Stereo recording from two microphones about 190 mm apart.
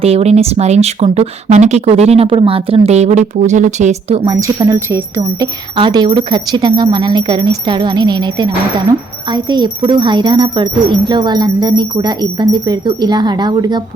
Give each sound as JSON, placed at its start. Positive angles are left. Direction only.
{"t": 0.0, "sound": "speech", "side_deg": -35}
{"t": 4.3, "sound": "speech", "side_deg": -20}
{"t": 5.7, "sound": "speech", "side_deg": -25}